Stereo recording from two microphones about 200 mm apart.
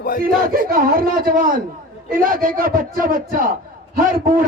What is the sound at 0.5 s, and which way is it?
A man's voice, 45° right (ahead or behind).